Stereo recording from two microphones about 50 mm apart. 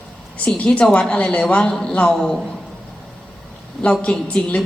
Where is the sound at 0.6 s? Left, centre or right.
Left; by 2.4 s centre.